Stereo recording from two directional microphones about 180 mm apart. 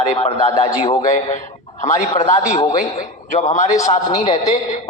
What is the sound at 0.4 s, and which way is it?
Speech, 20° left (ahead or behind).